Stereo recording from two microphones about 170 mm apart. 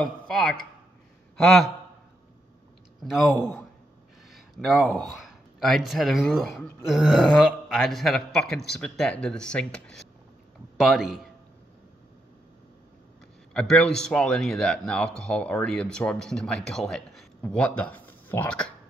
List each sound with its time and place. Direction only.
0.0 s a man's voice: 5° left (ahead or behind)
3.0 s speech: centre (ahead or behind)
4.3 s a man's voice: centre (ahead or behind)
13.5 s a man's voice: 5° left (ahead or behind)